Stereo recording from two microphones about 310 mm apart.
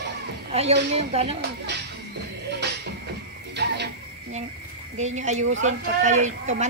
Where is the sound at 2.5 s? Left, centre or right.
Right.